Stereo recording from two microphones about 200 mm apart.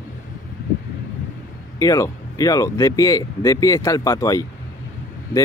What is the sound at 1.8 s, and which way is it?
Speech, 15° left (ahead or behind).